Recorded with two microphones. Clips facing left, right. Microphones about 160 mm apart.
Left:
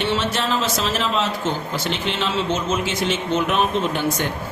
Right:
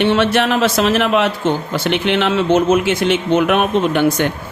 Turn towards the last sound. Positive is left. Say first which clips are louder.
# right 7 dB
turn(degrees=-65)  # may be behind; listen again after turning